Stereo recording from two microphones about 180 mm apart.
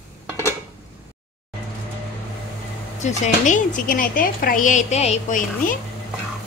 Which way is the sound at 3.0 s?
45° left (ahead or behind).